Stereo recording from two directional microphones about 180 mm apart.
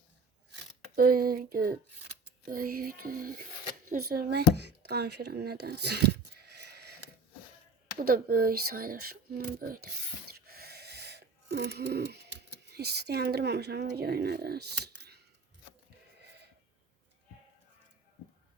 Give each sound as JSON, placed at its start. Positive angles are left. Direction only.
{"t": 0.9, "sound": "speech", "side_deg": -55}
{"t": 2.5, "sound": "music", "side_deg": -55}
{"t": 3.8, "sound": "speech", "side_deg": -55}
{"t": 10.3, "sound": "a sound", "side_deg": -60}